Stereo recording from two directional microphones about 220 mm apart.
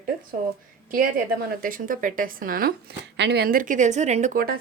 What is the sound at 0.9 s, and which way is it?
A woman's voice, 40° right (ahead or behind).